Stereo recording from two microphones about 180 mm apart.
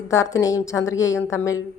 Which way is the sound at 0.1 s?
15° left (ahead or behind).